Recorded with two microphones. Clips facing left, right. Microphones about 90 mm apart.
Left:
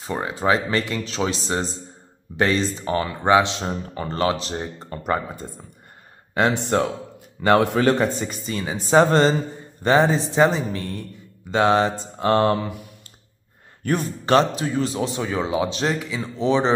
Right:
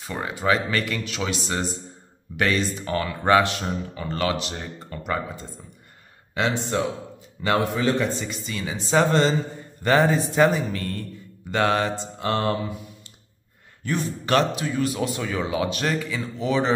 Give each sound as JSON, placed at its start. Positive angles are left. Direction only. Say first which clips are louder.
{"t": 0.0, "sound": "speech", "louder": "left 3 dB", "side_deg": 30}
{"t": 3.9, "sound": "speech", "louder": "left 4 dB", "side_deg": 35}
{"t": 6.5, "sound": "a man's voice", "louder": "left 3 dB", "side_deg": 60}
{"t": 8.0, "sound": "speech", "louder": "left 3 dB", "side_deg": 45}
{"t": 9.8, "sound": "speech", "louder": "left 2 dB", "side_deg": 20}
{"t": 12.2, "sound": "speech", "louder": "left 6 dB", "side_deg": 40}
{"t": 13.8, "sound": "a man's voice", "louder": "left 3 dB", "side_deg": 45}
{"t": 14.2, "sound": "speech", "louder": "left 4 dB", "side_deg": 35}